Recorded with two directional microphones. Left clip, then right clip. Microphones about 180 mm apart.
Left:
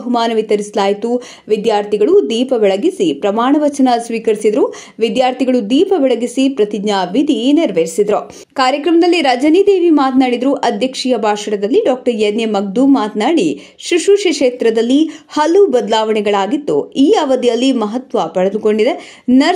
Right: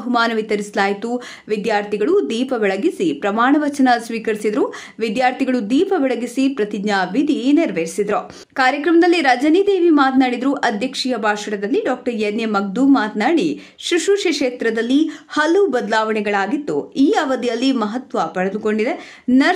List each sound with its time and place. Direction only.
0.1 s a woman's voice: 5° left (ahead or behind)